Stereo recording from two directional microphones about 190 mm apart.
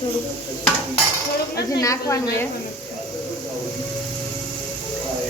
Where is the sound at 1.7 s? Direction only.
20° left (ahead or behind).